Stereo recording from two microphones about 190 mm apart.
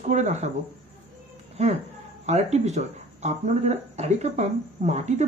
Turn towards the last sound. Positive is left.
turn(degrees=-35)  # may be behind; listen again after turning